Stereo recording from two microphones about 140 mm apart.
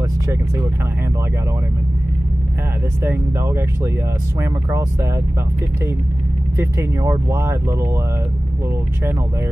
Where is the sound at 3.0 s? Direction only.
15° right (ahead or behind).